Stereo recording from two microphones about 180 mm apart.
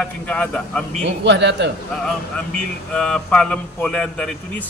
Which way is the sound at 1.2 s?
75° right (ahead or behind).